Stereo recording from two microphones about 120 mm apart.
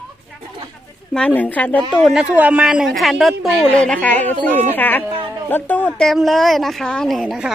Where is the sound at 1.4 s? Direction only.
15° left (ahead or behind).